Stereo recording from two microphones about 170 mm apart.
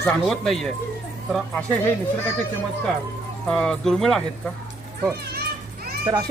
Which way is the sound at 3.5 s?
5° left (ahead or behind).